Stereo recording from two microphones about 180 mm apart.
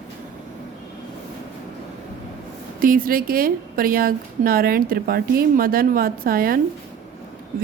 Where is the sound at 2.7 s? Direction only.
50° right (ahead or behind).